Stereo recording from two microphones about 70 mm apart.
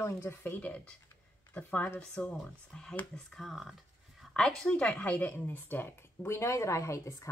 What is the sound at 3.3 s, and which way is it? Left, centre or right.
A woman's voice, centre.